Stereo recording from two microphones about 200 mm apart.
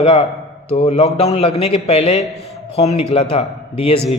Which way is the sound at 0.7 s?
30° left (ahead or behind).